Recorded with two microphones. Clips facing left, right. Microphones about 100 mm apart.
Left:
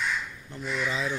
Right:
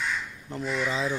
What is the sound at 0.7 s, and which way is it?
Speech, 30° right (ahead or behind).